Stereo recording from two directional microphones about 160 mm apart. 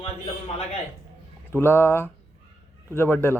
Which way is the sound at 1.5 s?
15° left (ahead or behind).